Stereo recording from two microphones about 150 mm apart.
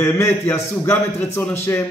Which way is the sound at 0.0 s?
20° left (ahead or behind).